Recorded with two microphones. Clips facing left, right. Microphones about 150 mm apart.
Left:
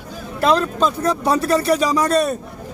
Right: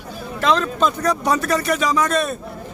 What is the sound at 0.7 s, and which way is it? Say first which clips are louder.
Speech: left 1 dB; 30° left (ahead or behind).